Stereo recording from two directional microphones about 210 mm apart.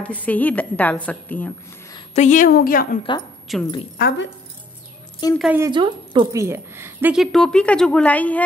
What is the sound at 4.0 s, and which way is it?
Speech, 50° left (ahead or behind).